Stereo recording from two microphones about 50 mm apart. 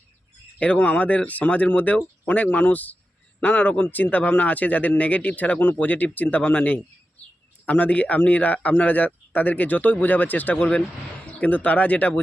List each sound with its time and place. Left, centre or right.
0.8 s speech: left
10.6 s speech: left